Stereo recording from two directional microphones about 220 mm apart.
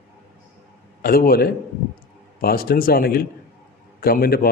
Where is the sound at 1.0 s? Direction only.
40° left (ahead or behind).